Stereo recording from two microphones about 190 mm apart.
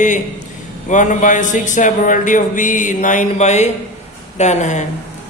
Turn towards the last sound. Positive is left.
turn(degrees=40)  # may be behind; listen again after turning